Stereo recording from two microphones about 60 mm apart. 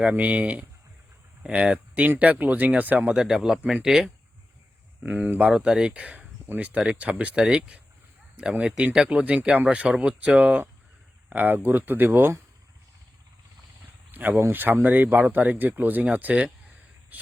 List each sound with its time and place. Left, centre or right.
0.0 s speech: right
3.2 s speech: centre
5.4 s speech: centre
7.3 s speech: centre; by 12.4 s right
14.1 s a sound: right
14.5 s speech: right